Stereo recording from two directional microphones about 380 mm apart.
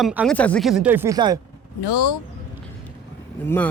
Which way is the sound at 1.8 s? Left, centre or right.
Left.